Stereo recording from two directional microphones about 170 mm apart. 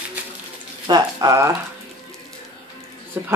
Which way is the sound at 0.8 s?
20° right (ahead or behind).